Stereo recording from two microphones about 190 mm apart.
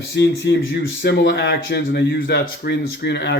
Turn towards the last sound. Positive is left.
turn(degrees=60)  # may be behind; listen again after turning